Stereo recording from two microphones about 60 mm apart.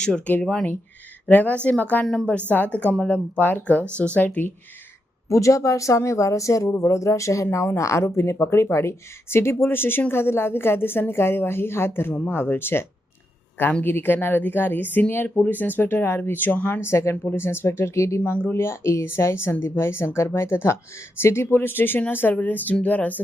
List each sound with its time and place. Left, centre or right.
0.3 s speech: left
5.3 s speech: left
7.4 s speech: left
13.8 s speech: left
16.8 s speech: left